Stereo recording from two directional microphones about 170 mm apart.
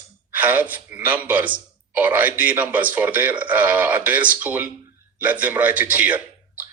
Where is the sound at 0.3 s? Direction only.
10° right (ahead or behind).